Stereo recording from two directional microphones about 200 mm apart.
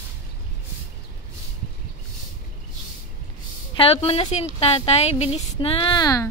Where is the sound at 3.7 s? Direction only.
30° left (ahead or behind).